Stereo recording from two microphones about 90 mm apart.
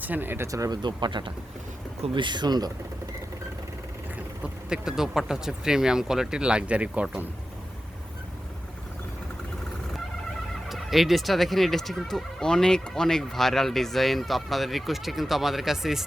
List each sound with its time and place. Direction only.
0.0 s speech: 20° right (ahead or behind)
0.4 s speech: 40° right (ahead or behind)
0.8 s speech: 55° right (ahead or behind)
4.7 s speech: 5° right (ahead or behind)
10.7 s speech: centre (ahead or behind)